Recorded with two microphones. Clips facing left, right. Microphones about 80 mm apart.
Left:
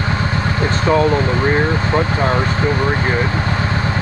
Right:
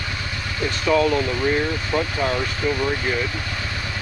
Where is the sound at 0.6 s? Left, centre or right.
Left.